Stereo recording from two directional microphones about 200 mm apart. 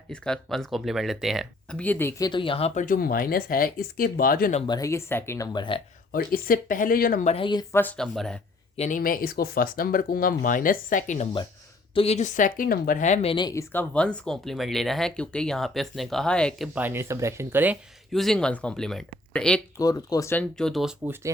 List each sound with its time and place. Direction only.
0.1 s speech: 5° left (ahead or behind); by 4.6 s 45° left (ahead or behind)
4.6 s speech: 20° left (ahead or behind)
6.1 s speech: 45° left (ahead or behind)
7.3 s speech: 25° left (ahead or behind)
7.7 s speech: 10° left (ahead or behind)
8.7 s speech: 35° left (ahead or behind)
13.3 s speech: 20° left (ahead or behind)
16.7 s speech: 10° right (ahead or behind)
18.1 s speech: centre (ahead or behind)
19.7 s speech: 15° left (ahead or behind); by 20.9 s centre (ahead or behind)